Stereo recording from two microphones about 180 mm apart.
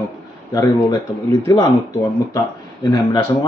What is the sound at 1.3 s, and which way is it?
A man's voice, 20° left (ahead or behind).